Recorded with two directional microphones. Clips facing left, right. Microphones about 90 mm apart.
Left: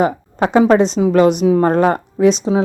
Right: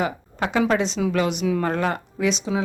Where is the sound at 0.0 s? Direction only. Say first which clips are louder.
Left 9 dB; 35° left (ahead or behind).